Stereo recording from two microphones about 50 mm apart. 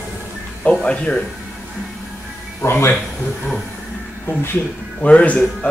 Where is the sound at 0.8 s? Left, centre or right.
Left.